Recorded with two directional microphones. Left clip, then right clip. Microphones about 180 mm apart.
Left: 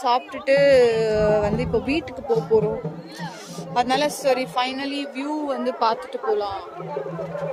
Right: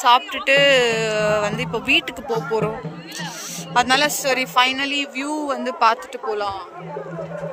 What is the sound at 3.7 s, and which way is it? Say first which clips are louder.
Speech: right 4 dB; 5° right (ahead or behind).